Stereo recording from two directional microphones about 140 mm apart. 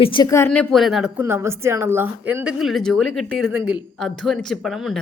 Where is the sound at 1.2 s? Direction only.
20° right (ahead or behind); by 3.4 s centre (ahead or behind).